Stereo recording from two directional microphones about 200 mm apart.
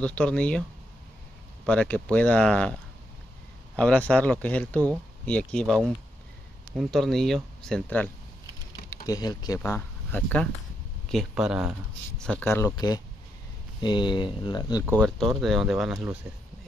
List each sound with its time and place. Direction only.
0.0 s speech: 5° left (ahead or behind)
1.7 s speech: 5° left (ahead or behind)
3.7 s speech: 5° left (ahead or behind)
8.9 s speech: 15° left (ahead or behind)
15.0 s speech: centre (ahead or behind)